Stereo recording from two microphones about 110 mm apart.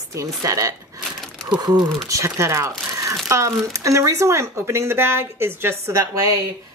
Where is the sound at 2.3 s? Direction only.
25° right (ahead or behind).